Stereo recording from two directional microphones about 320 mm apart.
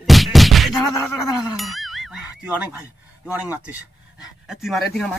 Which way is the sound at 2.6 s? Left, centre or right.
Centre.